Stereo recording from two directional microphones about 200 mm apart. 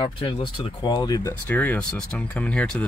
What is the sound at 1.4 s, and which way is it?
Speech, 10° left (ahead or behind).